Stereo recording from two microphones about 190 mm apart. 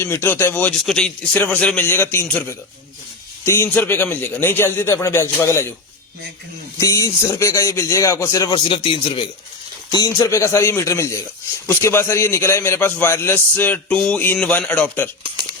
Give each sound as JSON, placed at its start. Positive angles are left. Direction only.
{"t": 0.0, "sound": "a man's voice", "side_deg": 15}
{"t": 6.7, "sound": "a man's voice", "side_deg": 15}